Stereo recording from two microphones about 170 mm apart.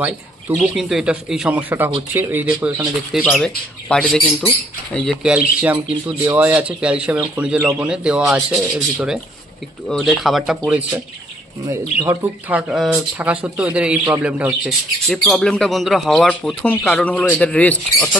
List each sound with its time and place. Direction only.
0.0 s speech: 5° right (ahead or behind)
15.0 s speech: centre (ahead or behind)